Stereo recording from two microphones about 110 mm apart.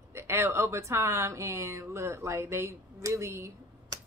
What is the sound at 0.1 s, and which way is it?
A woman's voice, 25° right (ahead or behind).